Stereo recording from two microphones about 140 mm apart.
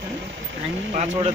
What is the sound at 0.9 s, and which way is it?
Speech, 55° right (ahead or behind).